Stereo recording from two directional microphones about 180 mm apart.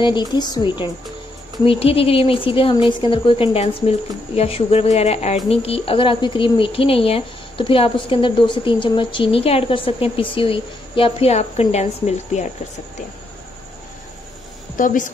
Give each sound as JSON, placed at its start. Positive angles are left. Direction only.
{"t": 0.3, "sound": "speech", "side_deg": 25}
{"t": 14.8, "sound": "a woman's voice", "side_deg": 45}